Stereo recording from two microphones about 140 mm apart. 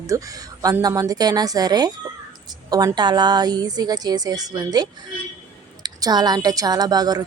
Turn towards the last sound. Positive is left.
turn(degrees=-30)  # may be behind; listen again after turning